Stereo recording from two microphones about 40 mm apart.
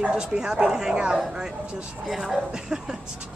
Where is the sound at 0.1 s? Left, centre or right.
Centre.